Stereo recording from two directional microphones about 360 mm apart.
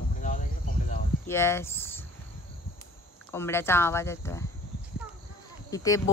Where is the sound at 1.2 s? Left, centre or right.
Centre.